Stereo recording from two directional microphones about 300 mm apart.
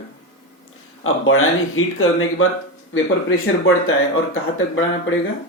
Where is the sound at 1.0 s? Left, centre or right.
Left.